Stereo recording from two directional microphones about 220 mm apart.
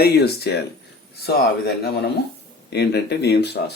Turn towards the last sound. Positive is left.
turn(degrees=50)  # may be behind; listen again after turning